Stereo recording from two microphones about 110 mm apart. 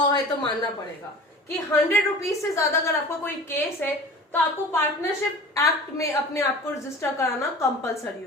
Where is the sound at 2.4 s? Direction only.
30° left (ahead or behind).